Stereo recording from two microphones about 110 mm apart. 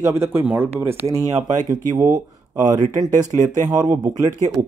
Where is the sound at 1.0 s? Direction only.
30° right (ahead or behind).